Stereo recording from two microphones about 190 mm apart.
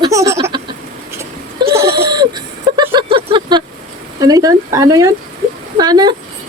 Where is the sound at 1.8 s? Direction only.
55° right (ahead or behind).